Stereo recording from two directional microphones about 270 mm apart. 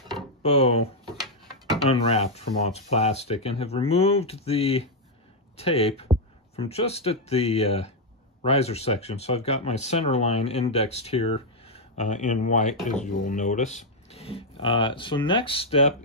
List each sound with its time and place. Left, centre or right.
0.4 s speech: left
1.9 s speech: left